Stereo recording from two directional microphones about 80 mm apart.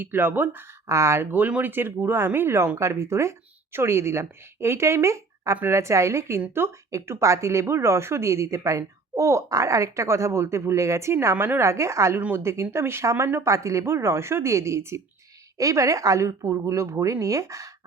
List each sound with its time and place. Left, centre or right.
0.0 s speech: right
0.9 s a woman's voice: right